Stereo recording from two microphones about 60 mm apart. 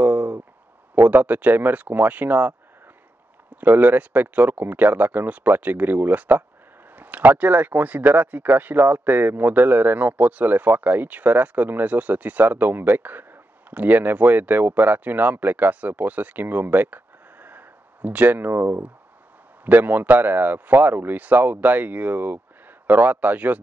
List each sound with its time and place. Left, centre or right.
0.0 s a sound: right
0.9 s speech: right
3.6 s speech: right